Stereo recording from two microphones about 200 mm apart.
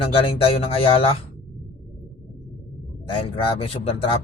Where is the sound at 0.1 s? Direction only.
25° left (ahead or behind).